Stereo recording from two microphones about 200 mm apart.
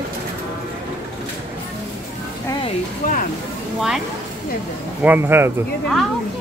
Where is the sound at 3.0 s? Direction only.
45° left (ahead or behind).